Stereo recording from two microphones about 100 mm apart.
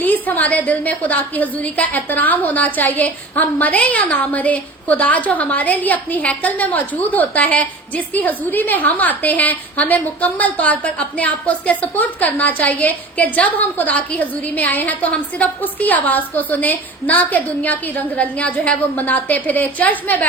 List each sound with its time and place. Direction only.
0.0 s a woman's voice: 15° left (ahead or behind)